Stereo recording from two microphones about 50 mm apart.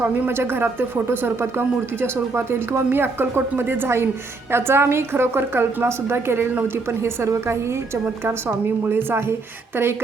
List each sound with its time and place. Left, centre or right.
0.0 s a woman's voice: right
6.8 s a woman's voice: right
8.2 s a woman's voice: right